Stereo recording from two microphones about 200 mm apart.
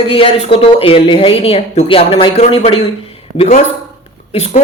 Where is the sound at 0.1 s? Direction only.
30° left (ahead or behind).